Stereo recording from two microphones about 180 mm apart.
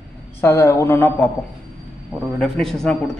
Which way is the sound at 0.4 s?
15° left (ahead or behind).